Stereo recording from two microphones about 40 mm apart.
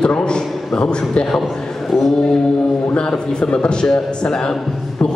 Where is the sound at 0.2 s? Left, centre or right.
Left.